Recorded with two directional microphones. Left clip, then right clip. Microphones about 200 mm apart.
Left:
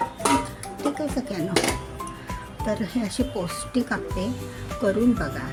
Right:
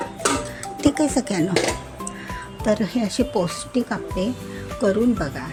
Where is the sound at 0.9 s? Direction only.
35° right (ahead or behind).